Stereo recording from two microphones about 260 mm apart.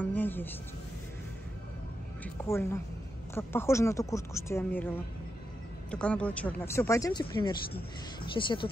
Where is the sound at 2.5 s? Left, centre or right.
Centre.